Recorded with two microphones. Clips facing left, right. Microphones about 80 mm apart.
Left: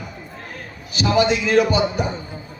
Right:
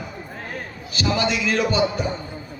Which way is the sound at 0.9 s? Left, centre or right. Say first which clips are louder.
Left 5 dB; left.